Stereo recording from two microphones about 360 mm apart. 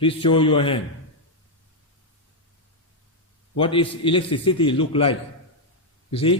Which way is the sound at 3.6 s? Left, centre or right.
Centre.